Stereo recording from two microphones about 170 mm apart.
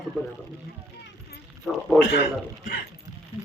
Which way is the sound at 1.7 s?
Centre (ahead or behind).